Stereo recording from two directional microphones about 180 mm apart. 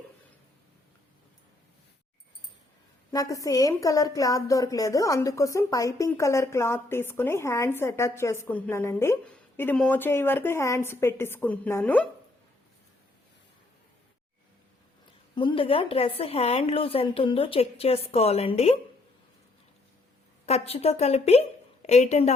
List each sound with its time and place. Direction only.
3.1 s a woman's voice: 20° left (ahead or behind)
15.4 s a woman's voice: 30° left (ahead or behind)
20.5 s a woman's voice: 35° left (ahead or behind)